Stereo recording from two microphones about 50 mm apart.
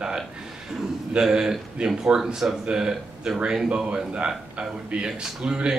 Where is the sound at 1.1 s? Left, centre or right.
Centre.